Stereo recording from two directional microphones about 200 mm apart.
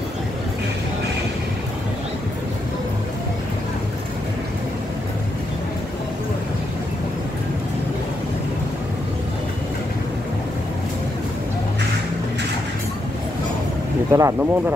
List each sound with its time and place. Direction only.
14.1 s speech: 15° right (ahead or behind)